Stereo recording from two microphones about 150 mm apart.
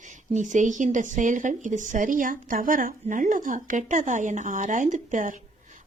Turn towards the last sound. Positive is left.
turn(degrees=-60)  # may be behind; listen again after turning